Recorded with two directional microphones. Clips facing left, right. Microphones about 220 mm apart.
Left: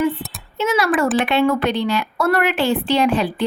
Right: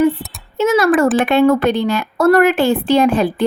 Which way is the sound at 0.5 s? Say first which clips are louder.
Right 6 dB; 45° right (ahead or behind).